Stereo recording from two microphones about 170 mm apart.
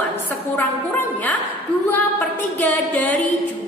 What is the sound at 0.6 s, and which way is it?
A woman's voice, 10° left (ahead or behind).